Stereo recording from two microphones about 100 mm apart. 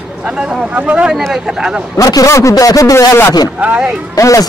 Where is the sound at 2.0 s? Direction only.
35° left (ahead or behind).